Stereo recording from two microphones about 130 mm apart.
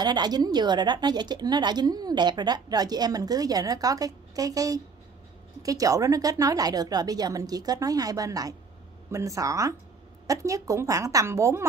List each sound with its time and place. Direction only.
0.0 s a woman's voice: 30° right (ahead or behind)